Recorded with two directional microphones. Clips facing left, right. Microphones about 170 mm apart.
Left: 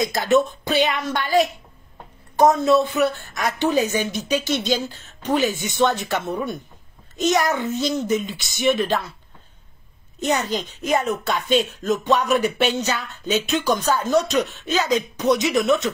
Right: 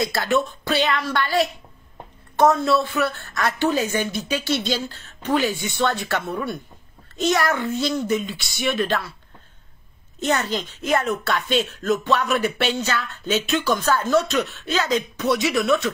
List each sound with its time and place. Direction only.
0.0 s speech: 20° left (ahead or behind)
10.4 s speech: 15° left (ahead or behind)